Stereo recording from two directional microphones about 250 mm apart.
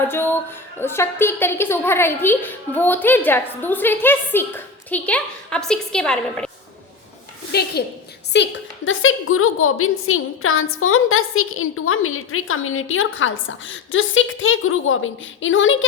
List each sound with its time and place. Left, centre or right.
0.1 s a woman's voice: centre
7.5 s a woman's voice: left